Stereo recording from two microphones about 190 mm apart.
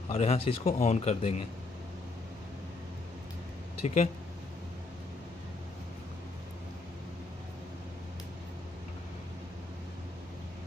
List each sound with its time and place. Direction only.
0.1 s speech: 35° left (ahead or behind)
3.8 s speech: 35° left (ahead or behind)